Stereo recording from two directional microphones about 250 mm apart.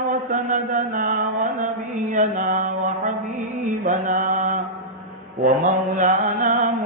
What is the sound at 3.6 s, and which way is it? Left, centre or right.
Mantra, right.